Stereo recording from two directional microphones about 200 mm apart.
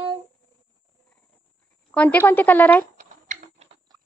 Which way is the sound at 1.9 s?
10° left (ahead or behind).